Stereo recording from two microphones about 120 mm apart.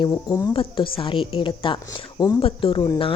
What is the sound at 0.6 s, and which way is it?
Speech, 45° left (ahead or behind).